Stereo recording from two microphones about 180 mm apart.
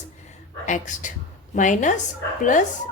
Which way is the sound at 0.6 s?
45° left (ahead or behind).